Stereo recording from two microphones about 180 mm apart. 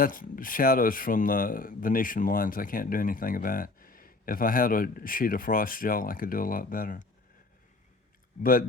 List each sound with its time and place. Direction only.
0.0 s speech: 50° left (ahead or behind)